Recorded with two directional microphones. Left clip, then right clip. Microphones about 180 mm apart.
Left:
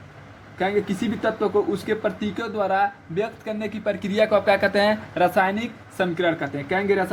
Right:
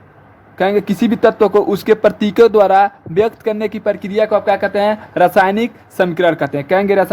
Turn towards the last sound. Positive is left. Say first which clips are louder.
# right 9 dB
turn(degrees=-55)  # may be behind; listen again after turning